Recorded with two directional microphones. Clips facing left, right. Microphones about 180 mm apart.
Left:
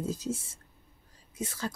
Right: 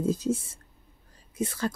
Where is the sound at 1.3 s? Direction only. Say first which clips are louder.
Right 6 dB; 60° right (ahead or behind).